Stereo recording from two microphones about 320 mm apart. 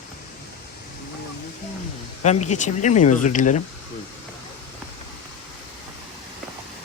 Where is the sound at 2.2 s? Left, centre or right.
Left.